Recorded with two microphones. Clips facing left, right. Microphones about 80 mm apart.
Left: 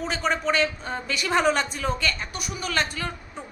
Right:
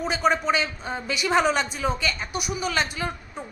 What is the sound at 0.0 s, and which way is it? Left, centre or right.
A man's voice, centre.